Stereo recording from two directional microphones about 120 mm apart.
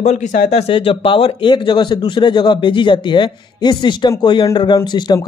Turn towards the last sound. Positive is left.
turn(degrees=35)  # may be behind; listen again after turning